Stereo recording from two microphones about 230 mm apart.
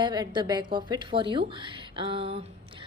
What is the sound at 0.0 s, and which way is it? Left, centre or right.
A woman's voice, centre.